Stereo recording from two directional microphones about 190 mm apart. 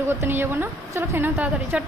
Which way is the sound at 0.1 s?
10° right (ahead or behind).